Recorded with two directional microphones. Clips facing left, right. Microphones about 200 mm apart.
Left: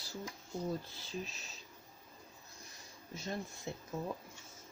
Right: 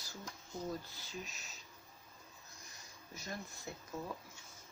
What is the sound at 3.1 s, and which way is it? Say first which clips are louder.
Speech: left 5 dB; 25° left (ahead or behind).